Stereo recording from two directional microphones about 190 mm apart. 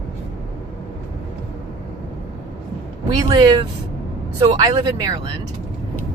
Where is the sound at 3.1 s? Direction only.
25° right (ahead or behind).